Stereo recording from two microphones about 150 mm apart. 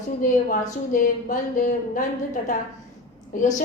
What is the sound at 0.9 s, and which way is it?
A woman's voice, 65° left (ahead or behind).